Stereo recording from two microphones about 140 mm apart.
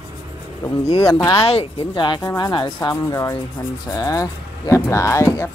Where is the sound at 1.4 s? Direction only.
40° left (ahead or behind); by 5.4 s 20° left (ahead or behind).